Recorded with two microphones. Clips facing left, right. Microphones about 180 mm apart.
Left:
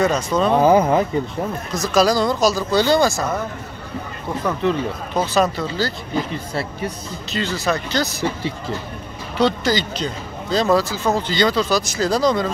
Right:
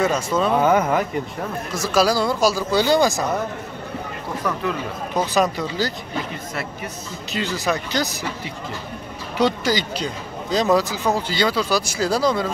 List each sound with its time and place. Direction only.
0.0 s speech: 5° right (ahead or behind)
0.5 s speech: 30° left (ahead or behind)
1.7 s speech: 5° right (ahead or behind)
5.1 s speech: 15° right (ahead or behind)
6.3 s speech: 30° left (ahead or behind)
7.3 s speech: 15° right (ahead or behind)
9.4 s speech: 10° right (ahead or behind)